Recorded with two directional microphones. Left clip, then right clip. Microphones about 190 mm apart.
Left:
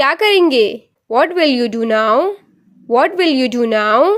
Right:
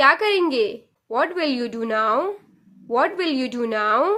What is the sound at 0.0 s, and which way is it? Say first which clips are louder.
Speech: left 5 dB; 40° left (ahead or behind).